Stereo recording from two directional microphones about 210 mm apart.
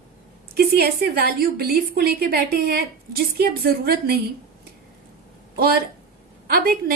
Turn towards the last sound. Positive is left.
turn(degrees=-45)  # may be behind; listen again after turning